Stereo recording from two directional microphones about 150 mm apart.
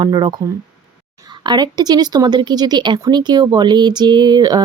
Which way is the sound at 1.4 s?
30° right (ahead or behind).